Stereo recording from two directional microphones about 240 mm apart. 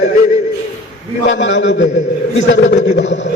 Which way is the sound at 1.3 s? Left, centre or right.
Left.